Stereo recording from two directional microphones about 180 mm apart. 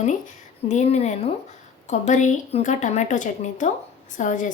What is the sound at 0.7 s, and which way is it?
A woman's voice, 40° left (ahead or behind).